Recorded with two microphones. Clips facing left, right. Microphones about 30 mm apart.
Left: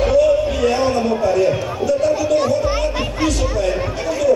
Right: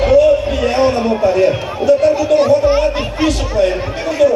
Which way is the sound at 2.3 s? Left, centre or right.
Right.